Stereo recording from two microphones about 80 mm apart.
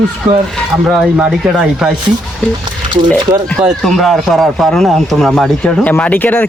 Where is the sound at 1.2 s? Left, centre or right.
Centre.